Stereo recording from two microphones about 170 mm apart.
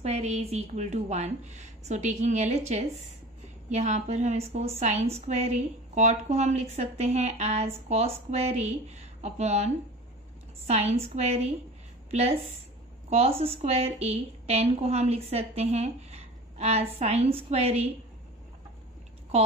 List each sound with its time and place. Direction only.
0.0 s a woman's voice: 40° right (ahead or behind)
10.7 s a woman's voice: 40° right (ahead or behind)